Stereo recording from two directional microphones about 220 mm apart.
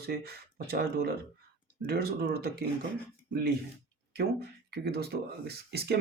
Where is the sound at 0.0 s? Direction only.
45° right (ahead or behind).